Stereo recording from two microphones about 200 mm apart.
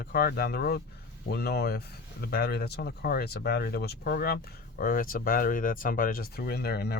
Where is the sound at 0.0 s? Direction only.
50° left (ahead or behind).